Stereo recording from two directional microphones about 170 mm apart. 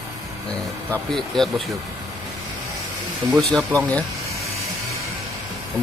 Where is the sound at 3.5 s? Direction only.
5° left (ahead or behind).